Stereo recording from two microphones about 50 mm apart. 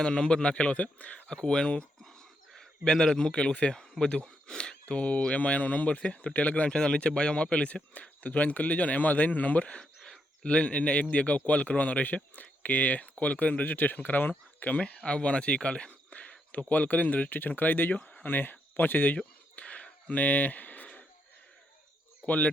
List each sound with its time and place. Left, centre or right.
0.0 s speech: centre
6.7 s speech: centre; by 17.9 s left
17.9 s speech: left
18.3 s speech: left
19.1 s a sound: left
22.3 s speech: left